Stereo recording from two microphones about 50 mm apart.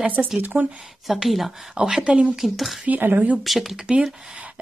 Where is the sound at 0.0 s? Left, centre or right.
Right.